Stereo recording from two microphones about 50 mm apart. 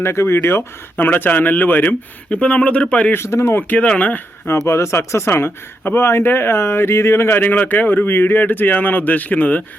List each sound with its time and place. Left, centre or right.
0.0 s speech: left
2.3 s speech: left
3.1 s speech: left
3.6 s speech: left
4.6 s speech: left
5.3 s speech: left
7.5 s speech: left